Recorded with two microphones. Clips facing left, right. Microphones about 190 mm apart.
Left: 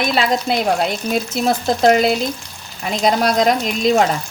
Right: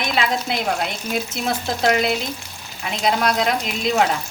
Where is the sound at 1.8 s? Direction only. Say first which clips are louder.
Left 5 dB; 40° left (ahead or behind).